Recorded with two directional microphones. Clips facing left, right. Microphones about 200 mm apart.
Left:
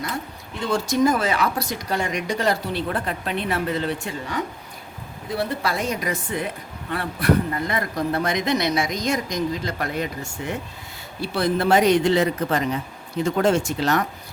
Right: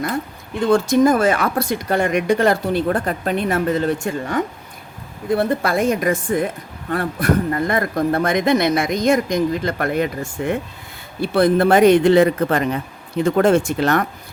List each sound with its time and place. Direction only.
0.6 s a man's voice: 55° right (ahead or behind)